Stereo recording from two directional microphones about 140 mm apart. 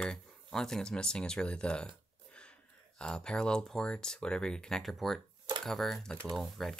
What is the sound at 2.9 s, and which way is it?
Speech, 5° left (ahead or behind).